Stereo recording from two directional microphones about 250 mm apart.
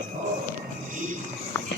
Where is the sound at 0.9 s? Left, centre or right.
Right.